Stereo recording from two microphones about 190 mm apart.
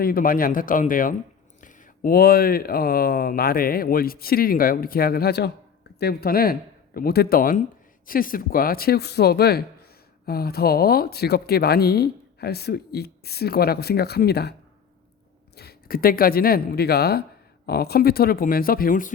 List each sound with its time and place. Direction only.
0.0 s speech: 50° left (ahead or behind)
15.5 s speech: 55° left (ahead or behind)